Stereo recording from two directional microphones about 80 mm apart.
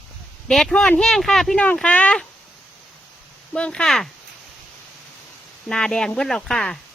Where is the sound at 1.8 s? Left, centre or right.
Centre.